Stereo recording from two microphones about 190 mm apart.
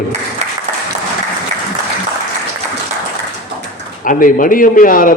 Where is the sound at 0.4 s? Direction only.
35° right (ahead or behind).